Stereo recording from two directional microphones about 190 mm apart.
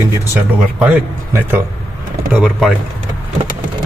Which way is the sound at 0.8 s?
10° right (ahead or behind).